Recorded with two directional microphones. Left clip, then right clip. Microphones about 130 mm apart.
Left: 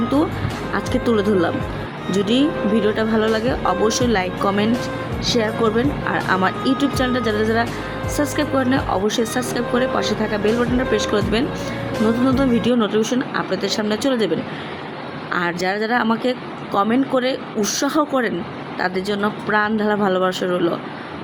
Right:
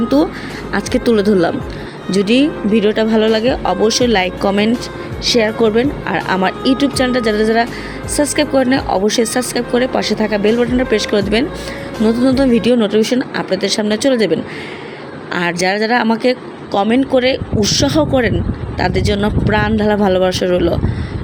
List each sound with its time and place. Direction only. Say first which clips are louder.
0.7 s speech: right 5 dB; 45° right (ahead or behind)
15.3 s speech: right 5 dB; 50° right (ahead or behind)